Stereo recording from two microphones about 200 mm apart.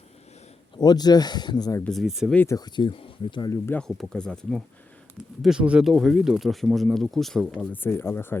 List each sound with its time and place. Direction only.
0.8 s speech: 20° left (ahead or behind)
1.8 s speech: centre (ahead or behind)
2.4 s speech: 15° left (ahead or behind)
3.7 s speech: 5° left (ahead or behind)